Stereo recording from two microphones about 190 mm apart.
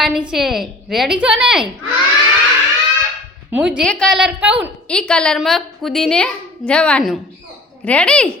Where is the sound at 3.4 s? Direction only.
5° right (ahead or behind).